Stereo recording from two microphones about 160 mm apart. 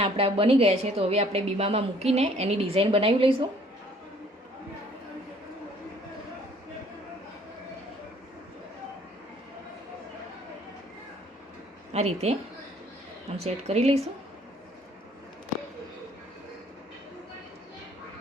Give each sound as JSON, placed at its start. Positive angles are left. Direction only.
{"t": 0.0, "sound": "a woman's voice", "side_deg": -35}
{"t": 11.9, "sound": "a woman's voice", "side_deg": -40}